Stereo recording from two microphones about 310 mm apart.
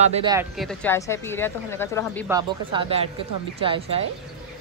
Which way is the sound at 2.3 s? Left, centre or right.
Centre.